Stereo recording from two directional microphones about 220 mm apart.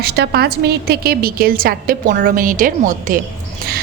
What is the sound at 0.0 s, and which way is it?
A woman's voice, 45° right (ahead or behind).